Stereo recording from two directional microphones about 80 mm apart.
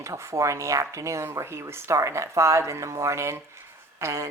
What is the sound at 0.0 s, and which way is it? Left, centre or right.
Speech, right.